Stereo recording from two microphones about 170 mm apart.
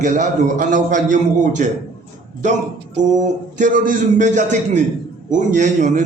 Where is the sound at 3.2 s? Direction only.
50° right (ahead or behind).